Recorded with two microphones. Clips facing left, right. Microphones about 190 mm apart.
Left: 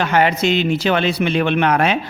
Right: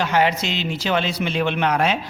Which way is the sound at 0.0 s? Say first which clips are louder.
Left 4 dB; 55° left (ahead or behind).